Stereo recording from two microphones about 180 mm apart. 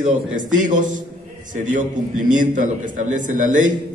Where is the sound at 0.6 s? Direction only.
45° right (ahead or behind).